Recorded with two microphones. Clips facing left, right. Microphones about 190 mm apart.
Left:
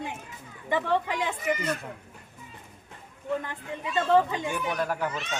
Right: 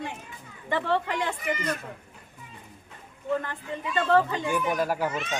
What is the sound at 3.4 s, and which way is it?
Speech, 15° left (ahead or behind).